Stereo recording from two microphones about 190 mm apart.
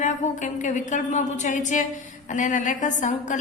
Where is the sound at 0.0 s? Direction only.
40° left (ahead or behind).